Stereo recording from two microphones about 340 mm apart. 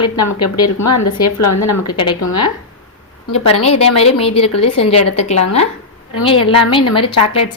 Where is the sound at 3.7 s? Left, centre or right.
Centre.